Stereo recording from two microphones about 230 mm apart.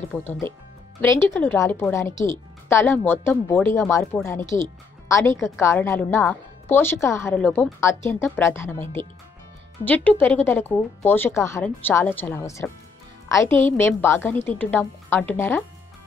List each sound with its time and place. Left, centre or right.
0.1 s speech: centre
9.8 s speech: centre